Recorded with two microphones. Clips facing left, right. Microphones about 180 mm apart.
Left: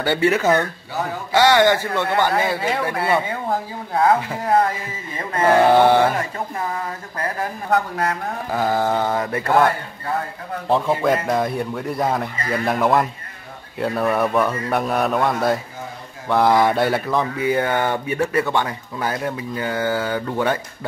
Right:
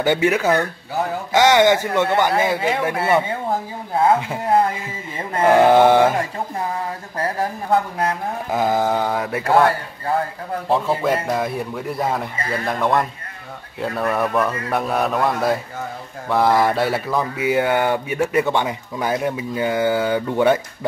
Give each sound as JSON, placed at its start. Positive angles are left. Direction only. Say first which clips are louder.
{"t": 0.0, "sound": "speech", "louder": "right 1 dB", "side_deg": -15}
{"t": 5.4, "sound": "speech", "louder": "right 1 dB", "side_deg": -15}
{"t": 8.5, "sound": "speech", "louder": "right 1 dB", "side_deg": -15}
{"t": 10.7, "sound": "a man's voice", "louder": "left 1 dB", "side_deg": -5}